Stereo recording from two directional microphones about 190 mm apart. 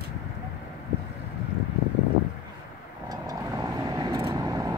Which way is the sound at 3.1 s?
20° right (ahead or behind).